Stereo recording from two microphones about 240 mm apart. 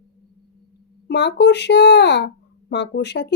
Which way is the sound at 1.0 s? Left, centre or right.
Left.